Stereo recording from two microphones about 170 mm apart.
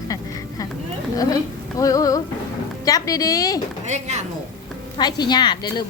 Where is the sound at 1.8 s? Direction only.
20° left (ahead or behind).